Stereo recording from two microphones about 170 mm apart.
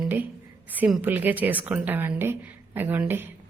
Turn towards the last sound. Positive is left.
turn(degrees=-10)  # may be behind; listen again after turning